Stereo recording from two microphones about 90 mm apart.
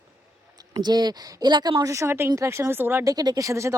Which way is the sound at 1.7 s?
35° right (ahead or behind).